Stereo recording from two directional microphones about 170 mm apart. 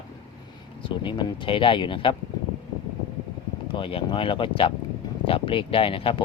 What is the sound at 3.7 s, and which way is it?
Speech, 30° left (ahead or behind).